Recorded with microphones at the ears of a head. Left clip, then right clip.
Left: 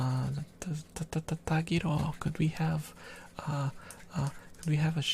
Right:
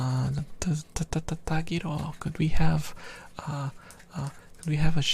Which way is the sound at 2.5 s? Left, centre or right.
Right.